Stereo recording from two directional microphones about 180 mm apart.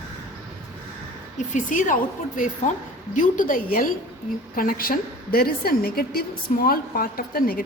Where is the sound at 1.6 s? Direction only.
45° left (ahead or behind).